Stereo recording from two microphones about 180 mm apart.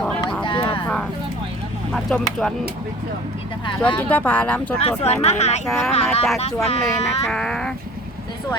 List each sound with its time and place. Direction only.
0.0 s a sound: 5° left (ahead or behind)
0.4 s a sound: 25° left (ahead or behind)
1.9 s speech: 5° left (ahead or behind)
3.8 s speech: 10° left (ahead or behind)
4.8 s speech: 35° left (ahead or behind)
5.6 s speech: centre (ahead or behind)
5.9 s speech: 35° left (ahead or behind)
6.8 s speech: centre (ahead or behind)